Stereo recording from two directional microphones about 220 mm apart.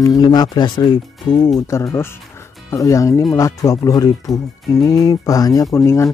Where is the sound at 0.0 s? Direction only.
20° left (ahead or behind).